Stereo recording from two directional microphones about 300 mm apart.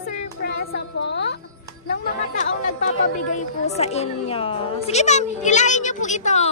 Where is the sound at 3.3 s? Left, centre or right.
Left.